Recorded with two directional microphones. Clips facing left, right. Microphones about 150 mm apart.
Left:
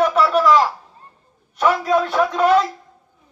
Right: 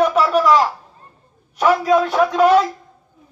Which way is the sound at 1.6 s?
15° right (ahead or behind).